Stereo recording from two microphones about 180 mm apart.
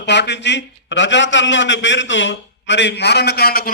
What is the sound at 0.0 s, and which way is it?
A man's voice, 70° left (ahead or behind).